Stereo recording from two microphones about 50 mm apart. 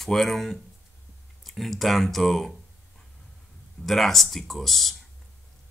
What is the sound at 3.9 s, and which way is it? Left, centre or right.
Speech, centre.